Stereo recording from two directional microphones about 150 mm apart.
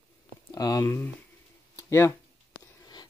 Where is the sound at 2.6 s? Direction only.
25° left (ahead or behind).